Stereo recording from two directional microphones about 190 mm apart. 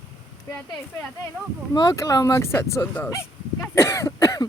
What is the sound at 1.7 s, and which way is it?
Speech, 20° left (ahead or behind).